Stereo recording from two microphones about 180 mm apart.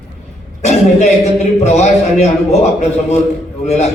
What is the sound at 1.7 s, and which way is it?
A man's voice, 40° left (ahead or behind).